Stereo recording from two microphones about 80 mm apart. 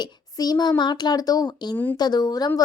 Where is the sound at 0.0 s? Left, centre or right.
Left.